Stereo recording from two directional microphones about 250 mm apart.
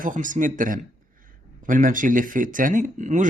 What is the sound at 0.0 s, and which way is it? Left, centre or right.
A man's voice, right.